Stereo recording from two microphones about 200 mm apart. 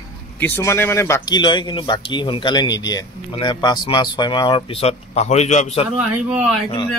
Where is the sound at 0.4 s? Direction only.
10° left (ahead or behind); by 5.9 s 35° left (ahead or behind).